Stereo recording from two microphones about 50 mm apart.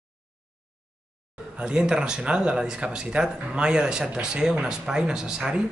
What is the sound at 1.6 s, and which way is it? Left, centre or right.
Speech, centre.